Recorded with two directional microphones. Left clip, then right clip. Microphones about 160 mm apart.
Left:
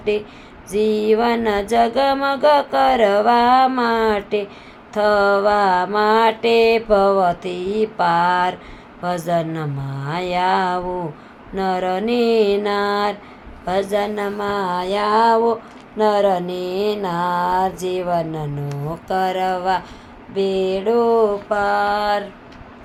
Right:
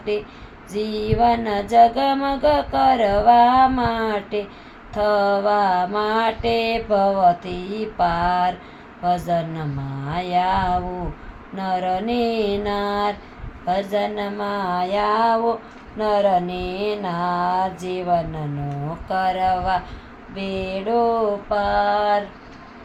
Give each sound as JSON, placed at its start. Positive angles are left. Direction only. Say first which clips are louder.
{"t": 0.7, "sound": "a sound", "louder": "left 7 dB", "side_deg": 40}
{"t": 1.7, "sound": "mantra", "louder": "right 3 dB", "side_deg": 40}
{"t": 19.0, "sound": "mantra", "louder": "even", "side_deg": 50}